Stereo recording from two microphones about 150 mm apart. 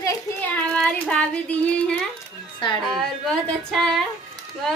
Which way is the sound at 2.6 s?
30° left (ahead or behind).